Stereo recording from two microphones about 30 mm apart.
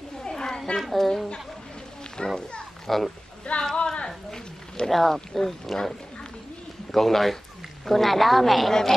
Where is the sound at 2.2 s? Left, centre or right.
Left.